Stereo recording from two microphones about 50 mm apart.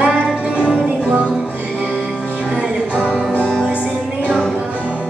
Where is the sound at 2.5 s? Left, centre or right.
Right.